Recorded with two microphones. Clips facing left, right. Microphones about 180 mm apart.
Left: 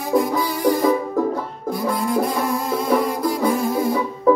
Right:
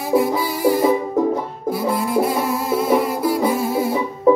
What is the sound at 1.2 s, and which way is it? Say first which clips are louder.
Music: right 2 dB; 20° right (ahead or behind).